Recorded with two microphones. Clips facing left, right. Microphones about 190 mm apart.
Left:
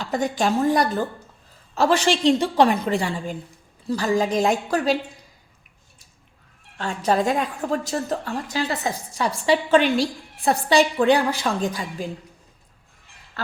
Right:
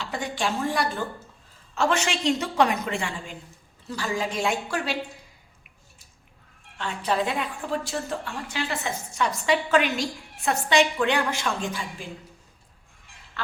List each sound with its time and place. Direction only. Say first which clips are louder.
0.0 s a woman's voice: left 6 dB; 40° left (ahead or behind)
6.7 s a woman's voice: left 5 dB; 45° left (ahead or behind)